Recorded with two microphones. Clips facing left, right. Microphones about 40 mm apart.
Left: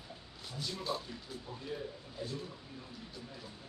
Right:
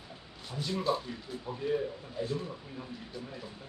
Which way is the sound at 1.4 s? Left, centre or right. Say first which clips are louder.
Right 12 dB; right.